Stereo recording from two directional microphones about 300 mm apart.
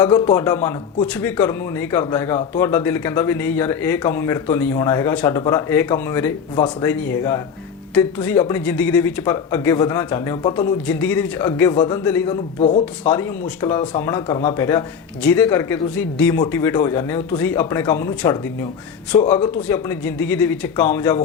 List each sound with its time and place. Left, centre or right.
0.0 s speech: centre
12.5 s speech: left
12.8 s speech: centre